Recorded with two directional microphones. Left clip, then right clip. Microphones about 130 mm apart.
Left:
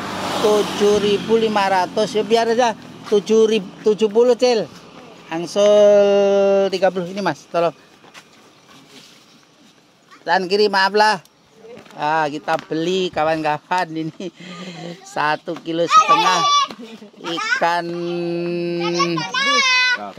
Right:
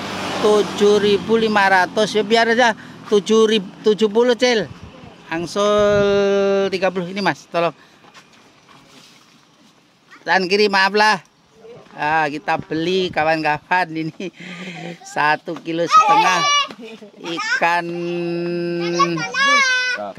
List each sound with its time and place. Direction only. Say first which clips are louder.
0.0 s vehicle: left 1 dB; 15° left (ahead or behind)
0.6 s a sound: right 1 dB; 15° left (ahead or behind)
0.8 s speech: right 2 dB; 30° right (ahead or behind)
5.3 s speech: left 3 dB; 10° right (ahead or behind)
10.2 s speech: right 1 dB; 20° right (ahead or behind)
19.4 s a child's voice: right 1 dB; 35° right (ahead or behind)